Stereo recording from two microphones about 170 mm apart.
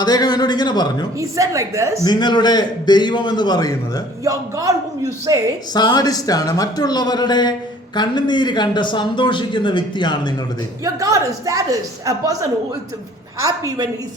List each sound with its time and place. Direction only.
0.0 s speech: 25° left (ahead or behind)
1.2 s a woman's voice: 20° right (ahead or behind)
2.0 s speech: 25° left (ahead or behind)
4.2 s a man's voice: 20° right (ahead or behind)
5.7 s speech: 25° left (ahead or behind)
10.8 s a man's voice: 20° right (ahead or behind)